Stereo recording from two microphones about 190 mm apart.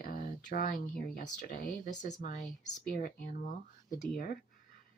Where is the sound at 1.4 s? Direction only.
45° left (ahead or behind).